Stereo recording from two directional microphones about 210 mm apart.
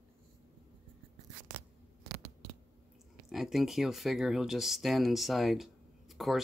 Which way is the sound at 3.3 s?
Centre (ahead or behind).